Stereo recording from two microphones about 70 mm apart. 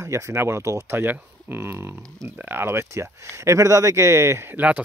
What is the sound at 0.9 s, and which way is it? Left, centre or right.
Speech, right.